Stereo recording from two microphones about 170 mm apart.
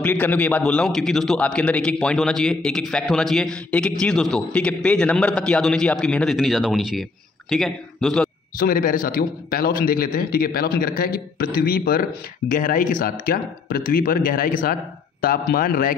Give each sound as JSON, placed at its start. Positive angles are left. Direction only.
{"t": 0.0, "sound": "a man's voice", "side_deg": 10}
{"t": 8.5, "sound": "a man's voice", "side_deg": 55}